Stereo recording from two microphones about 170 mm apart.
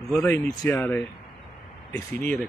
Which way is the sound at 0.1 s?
5° left (ahead or behind).